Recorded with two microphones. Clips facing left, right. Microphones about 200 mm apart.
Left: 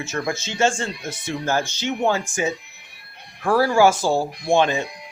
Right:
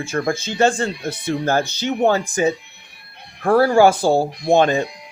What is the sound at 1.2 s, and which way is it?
Speech, 55° right (ahead or behind).